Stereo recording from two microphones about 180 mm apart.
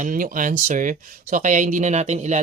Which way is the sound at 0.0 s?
50° right (ahead or behind).